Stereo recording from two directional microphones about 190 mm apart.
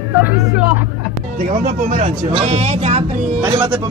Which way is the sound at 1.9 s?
30° right (ahead or behind).